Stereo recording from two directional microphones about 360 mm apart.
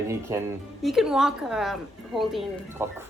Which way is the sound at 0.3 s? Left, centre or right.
Centre.